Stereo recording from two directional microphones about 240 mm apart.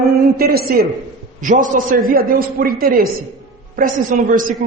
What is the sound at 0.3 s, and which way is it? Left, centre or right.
A woman's voice, right.